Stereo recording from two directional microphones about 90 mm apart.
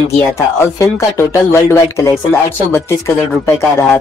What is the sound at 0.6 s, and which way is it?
Speech, 30° left (ahead or behind).